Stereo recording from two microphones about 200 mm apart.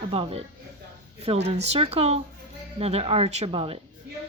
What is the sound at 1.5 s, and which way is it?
Speech, 30° right (ahead or behind).